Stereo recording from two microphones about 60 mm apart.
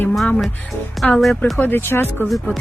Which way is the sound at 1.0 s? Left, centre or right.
Centre.